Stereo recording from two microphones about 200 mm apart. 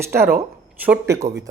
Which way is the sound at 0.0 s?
10° right (ahead or behind).